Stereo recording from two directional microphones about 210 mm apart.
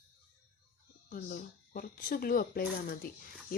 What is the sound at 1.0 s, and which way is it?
Speech, 40° left (ahead or behind).